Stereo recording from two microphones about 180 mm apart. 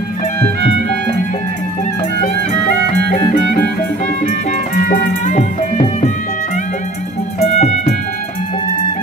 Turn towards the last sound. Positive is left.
turn(degrees=40)  # may be behind; listen again after turning